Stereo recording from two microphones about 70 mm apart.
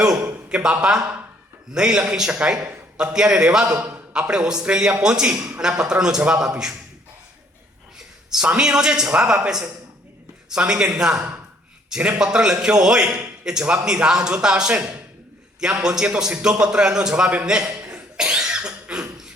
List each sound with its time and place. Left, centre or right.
0.0 s a man's voice: centre
7.9 s a sound: centre
8.4 s a man's voice: centre
17.7 s cough: centre